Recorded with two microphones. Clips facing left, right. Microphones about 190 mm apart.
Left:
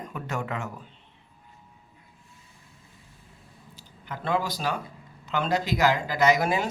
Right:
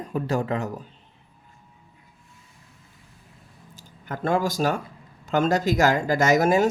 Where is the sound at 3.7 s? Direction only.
45° right (ahead or behind).